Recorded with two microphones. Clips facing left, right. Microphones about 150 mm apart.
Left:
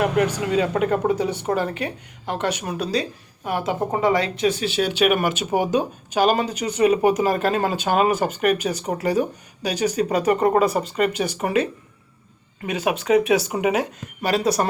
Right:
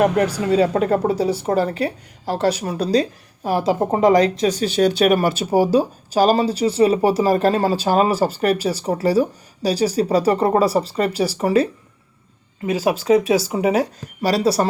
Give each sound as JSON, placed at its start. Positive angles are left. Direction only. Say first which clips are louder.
{"t": 0.4, "sound": "a woman's voice", "louder": "right 4 dB", "side_deg": -35}